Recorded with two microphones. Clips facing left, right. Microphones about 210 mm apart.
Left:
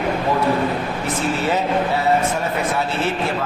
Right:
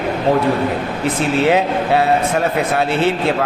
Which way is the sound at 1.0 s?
70° right (ahead or behind).